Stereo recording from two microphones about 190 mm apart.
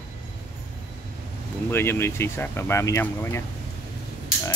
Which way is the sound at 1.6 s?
10° left (ahead or behind).